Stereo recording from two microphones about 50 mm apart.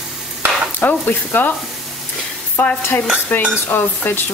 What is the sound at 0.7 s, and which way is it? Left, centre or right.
Stir, left.